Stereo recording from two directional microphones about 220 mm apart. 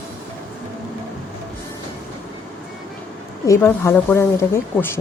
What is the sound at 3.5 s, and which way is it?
Speech, 10° left (ahead or behind).